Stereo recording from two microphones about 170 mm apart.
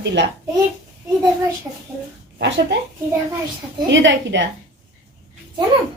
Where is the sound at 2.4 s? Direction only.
90° right.